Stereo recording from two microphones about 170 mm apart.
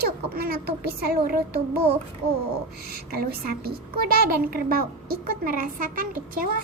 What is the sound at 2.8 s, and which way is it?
A child's voice, 65° right (ahead or behind).